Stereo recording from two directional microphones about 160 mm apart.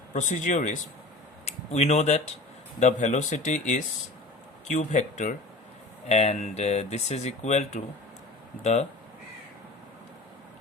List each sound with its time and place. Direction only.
0.1 s speech: 50° left (ahead or behind)